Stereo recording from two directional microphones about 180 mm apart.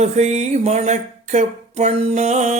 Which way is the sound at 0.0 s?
35° right (ahead or behind).